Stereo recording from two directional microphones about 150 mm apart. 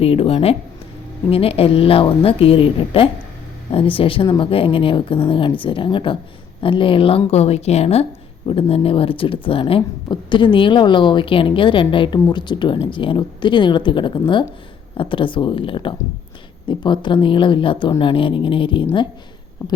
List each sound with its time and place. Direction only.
0.0 s speech: 40° left (ahead or behind)